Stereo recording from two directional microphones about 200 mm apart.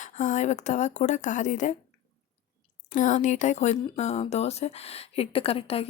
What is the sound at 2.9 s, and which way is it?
A woman's voice, 40° left (ahead or behind).